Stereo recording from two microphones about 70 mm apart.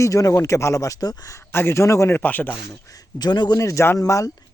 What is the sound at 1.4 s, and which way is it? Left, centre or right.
Speech, left.